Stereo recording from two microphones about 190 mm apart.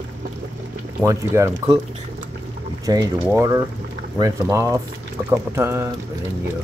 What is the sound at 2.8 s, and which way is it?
A man's voice, 20° right (ahead or behind).